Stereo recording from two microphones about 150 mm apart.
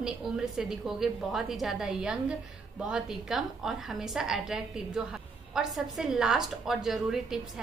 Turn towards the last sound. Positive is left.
turn(degrees=-5)  # may be behind; listen again after turning